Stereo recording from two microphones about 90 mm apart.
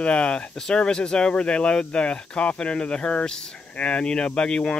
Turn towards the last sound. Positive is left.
turn(degrees=10)  # may be behind; listen again after turning